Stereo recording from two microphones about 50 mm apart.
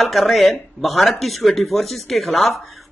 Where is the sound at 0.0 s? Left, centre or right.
Centre.